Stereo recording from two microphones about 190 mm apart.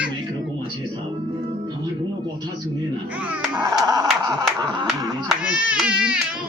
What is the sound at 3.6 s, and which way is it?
Dog, 20° right (ahead or behind).